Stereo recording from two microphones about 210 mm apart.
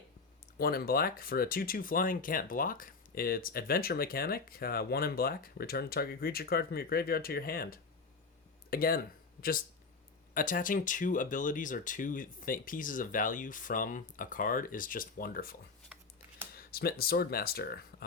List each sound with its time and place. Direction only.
0.6 s speech: 45° left (ahead or behind)
10.3 s speech: 40° left (ahead or behind)
16.6 s speech: 45° left (ahead or behind)